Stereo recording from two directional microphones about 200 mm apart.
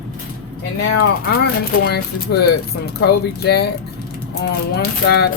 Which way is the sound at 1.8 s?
55° left (ahead or behind).